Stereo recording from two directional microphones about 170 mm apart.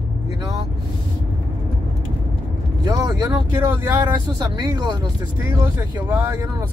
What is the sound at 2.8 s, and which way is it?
Speech, 20° right (ahead or behind).